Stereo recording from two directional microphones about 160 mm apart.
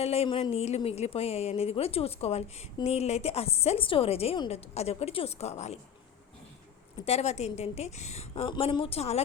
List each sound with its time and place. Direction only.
0.0 s speech: 40° left (ahead or behind)
7.0 s a woman's voice: 40° left (ahead or behind)
8.4 s speech: 30° left (ahead or behind)